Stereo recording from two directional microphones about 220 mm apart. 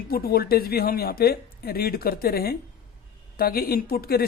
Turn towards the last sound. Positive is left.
turn(degrees=45)  # may be behind; listen again after turning